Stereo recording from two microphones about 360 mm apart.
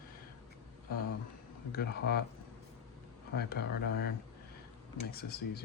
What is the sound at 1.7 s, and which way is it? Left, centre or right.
Speech, left.